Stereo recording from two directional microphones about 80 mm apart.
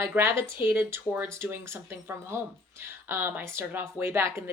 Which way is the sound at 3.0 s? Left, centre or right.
Right.